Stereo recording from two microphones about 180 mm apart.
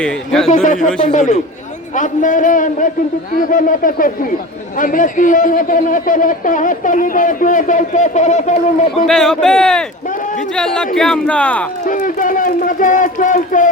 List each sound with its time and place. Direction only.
0.4 s a man's voice: 45° left (ahead or behind)
9.0 s speech: centre (ahead or behind)
11.9 s a man's voice: 50° left (ahead or behind)